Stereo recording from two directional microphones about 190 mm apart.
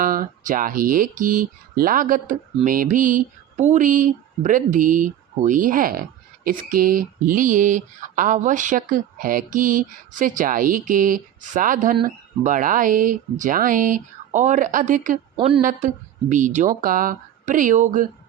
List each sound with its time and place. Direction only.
0.0 s speech: 45° right (ahead or behind)
15.4 s a woman's voice: 25° right (ahead or behind)
16.3 s speech: 40° right (ahead or behind)